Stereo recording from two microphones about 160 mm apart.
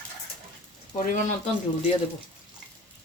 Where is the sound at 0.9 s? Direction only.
50° left (ahead or behind).